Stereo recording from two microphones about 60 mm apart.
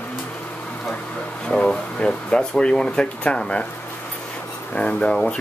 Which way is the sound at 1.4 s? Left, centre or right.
Centre.